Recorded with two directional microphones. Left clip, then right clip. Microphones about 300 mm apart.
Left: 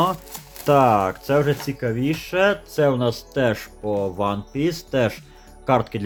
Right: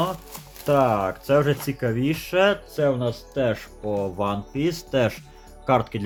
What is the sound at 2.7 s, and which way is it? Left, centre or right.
Speech, centre.